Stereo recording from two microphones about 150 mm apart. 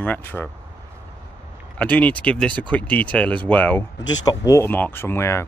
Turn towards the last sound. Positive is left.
turn(degrees=15)  # may be behind; listen again after turning